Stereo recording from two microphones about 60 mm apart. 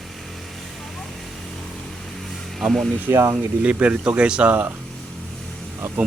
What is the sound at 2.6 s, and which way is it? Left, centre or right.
Speech, centre.